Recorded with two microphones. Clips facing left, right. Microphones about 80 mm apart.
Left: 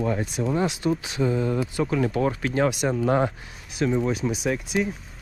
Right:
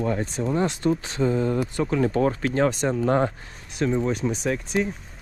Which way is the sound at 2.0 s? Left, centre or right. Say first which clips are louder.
Right 2 dB; right.